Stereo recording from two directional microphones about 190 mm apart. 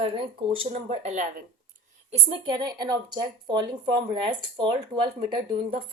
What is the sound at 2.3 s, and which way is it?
Speech, 25° right (ahead or behind).